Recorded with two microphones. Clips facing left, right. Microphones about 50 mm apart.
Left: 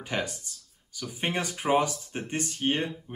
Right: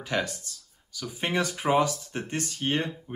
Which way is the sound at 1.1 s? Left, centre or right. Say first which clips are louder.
Right 3 dB; left.